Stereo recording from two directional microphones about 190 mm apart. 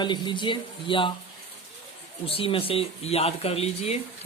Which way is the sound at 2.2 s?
30° left (ahead or behind).